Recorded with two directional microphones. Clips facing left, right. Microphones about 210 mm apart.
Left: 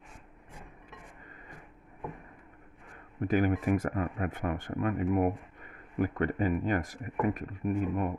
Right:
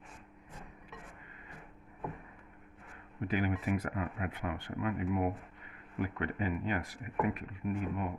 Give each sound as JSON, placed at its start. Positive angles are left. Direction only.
{"t": 3.2, "sound": "speech", "side_deg": 45}